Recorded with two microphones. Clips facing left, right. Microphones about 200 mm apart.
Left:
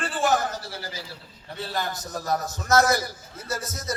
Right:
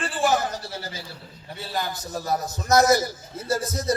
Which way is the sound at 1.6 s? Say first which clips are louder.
Right 1 dB; 5° right (ahead or behind).